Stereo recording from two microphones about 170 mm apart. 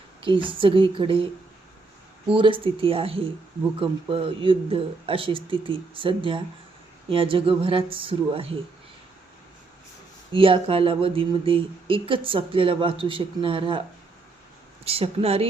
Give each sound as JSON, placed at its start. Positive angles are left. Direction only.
{"t": 0.2, "sound": "speech", "side_deg": -30}
{"t": 10.3, "sound": "speech", "side_deg": -30}
{"t": 14.8, "sound": "speech", "side_deg": -35}